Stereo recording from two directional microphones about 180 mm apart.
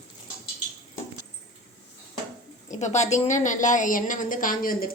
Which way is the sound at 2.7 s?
40° left (ahead or behind).